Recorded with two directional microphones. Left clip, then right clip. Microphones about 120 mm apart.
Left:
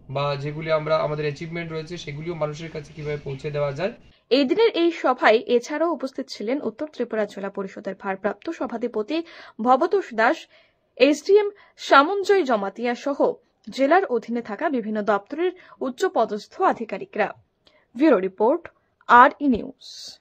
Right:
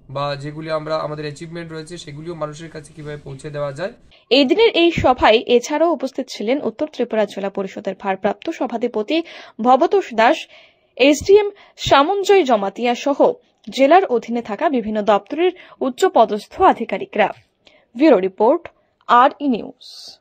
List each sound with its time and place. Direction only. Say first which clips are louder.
0.1 s speech: right 2 dB; centre (ahead or behind)
4.3 s a woman's voice: right 5 dB; 15° right (ahead or behind); by 17.4 s 35° right (ahead or behind)
17.9 s speech: right 5 dB; 5° right (ahead or behind)